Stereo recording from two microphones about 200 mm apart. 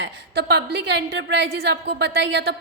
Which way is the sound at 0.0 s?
55° right (ahead or behind).